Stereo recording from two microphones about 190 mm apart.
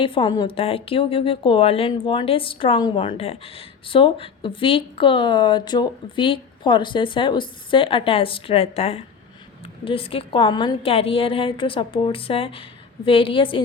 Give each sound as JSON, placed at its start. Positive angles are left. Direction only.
{"t": 0.0, "sound": "a woman's voice", "side_deg": 25}